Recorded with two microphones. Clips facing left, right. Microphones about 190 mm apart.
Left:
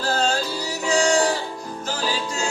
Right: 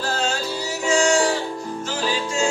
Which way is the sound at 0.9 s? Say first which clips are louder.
Right 1 dB; 35° left (ahead or behind).